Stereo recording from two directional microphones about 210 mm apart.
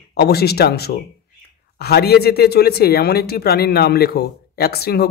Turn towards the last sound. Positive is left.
turn(degrees=50)  # may be behind; listen again after turning